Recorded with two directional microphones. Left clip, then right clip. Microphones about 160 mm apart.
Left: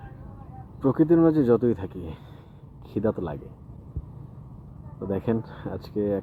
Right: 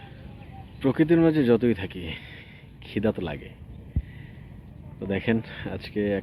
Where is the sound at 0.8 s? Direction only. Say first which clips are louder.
Left 1 dB; 20° right (ahead or behind).